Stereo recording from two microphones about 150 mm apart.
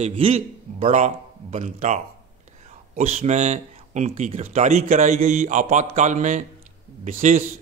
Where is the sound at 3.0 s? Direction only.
45° right (ahead or behind).